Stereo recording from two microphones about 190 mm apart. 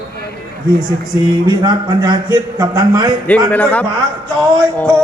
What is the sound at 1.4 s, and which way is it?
A man's voice, 25° right (ahead or behind).